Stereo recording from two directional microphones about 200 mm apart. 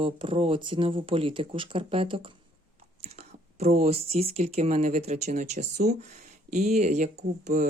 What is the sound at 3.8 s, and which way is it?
Speech, 30° right (ahead or behind).